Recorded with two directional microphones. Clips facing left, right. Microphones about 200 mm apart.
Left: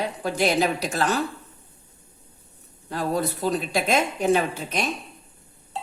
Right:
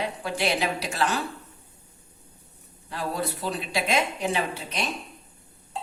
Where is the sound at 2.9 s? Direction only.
45° left (ahead or behind).